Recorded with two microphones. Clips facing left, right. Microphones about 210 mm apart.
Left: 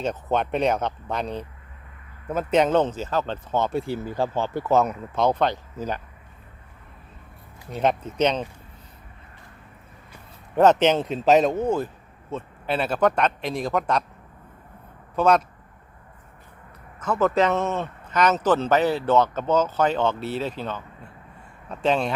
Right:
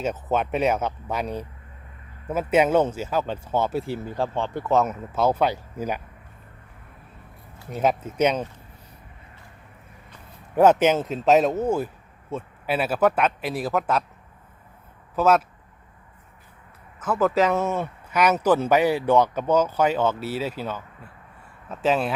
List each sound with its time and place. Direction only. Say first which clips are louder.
0.0 s speech: even; 5° right (ahead or behind)
7.7 s speech: even; 5° right (ahead or behind)
10.5 s speech: even; 10° right (ahead or behind)
15.1 s speech: even; 5° right (ahead or behind)
17.0 s speech: even; 5° right (ahead or behind)